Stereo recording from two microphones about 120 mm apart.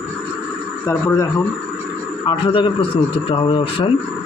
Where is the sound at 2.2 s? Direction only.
45° left (ahead or behind).